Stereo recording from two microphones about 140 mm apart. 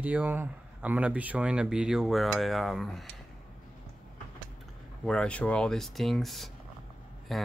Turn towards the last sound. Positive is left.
turn(degrees=0)  # may be behind; listen again after turning